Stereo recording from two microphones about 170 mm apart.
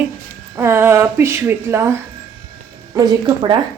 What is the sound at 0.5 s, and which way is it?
A woman's voice, 15° right (ahead or behind).